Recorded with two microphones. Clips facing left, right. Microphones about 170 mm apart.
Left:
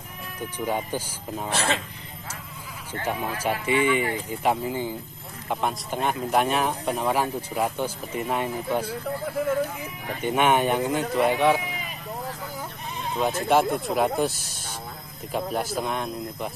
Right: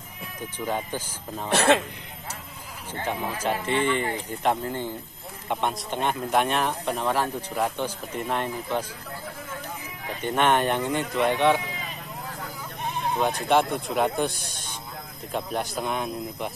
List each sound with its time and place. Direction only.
0.7 s speech: 10° left (ahead or behind)
1.5 s speech: 60° right (ahead or behind)
3.1 s speech: 10° left (ahead or behind)
10.2 s speech: 10° left (ahead or behind)
13.2 s speech: 5° left (ahead or behind)